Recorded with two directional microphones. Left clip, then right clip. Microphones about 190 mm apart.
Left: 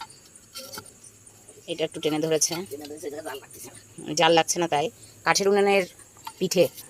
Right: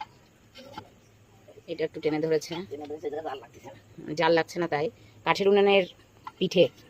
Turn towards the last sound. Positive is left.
turn(degrees=0)  # may be behind; listen again after turning